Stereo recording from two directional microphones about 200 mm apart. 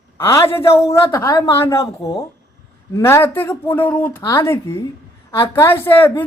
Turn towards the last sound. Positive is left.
turn(degrees=10)  # may be behind; listen again after turning